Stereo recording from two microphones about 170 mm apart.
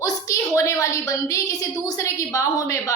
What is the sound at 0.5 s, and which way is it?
A woman's voice, 20° left (ahead or behind).